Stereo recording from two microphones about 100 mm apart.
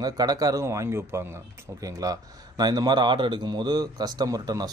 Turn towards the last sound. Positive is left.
turn(degrees=-40)  # may be behind; listen again after turning